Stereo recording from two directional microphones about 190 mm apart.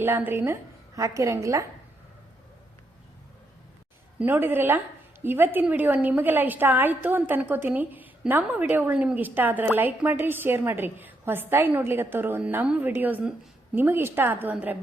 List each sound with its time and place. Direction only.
0.0 s a woman's voice: 10° right (ahead or behind)
4.2 s a woman's voice: 10° right (ahead or behind)